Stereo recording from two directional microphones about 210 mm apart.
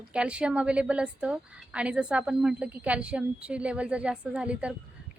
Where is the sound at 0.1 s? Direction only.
5° right (ahead or behind).